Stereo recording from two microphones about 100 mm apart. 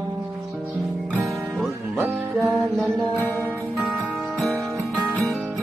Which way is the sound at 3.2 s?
20° left (ahead or behind).